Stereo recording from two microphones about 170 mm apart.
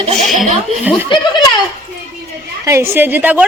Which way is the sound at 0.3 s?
45° right (ahead or behind).